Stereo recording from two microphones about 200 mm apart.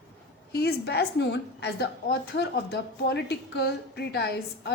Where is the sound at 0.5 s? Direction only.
55° left (ahead or behind).